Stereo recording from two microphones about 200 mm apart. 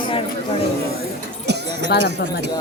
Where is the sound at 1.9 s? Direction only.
55° left (ahead or behind).